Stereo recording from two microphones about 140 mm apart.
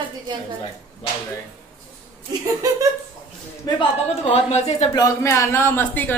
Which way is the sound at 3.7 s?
35° left (ahead or behind).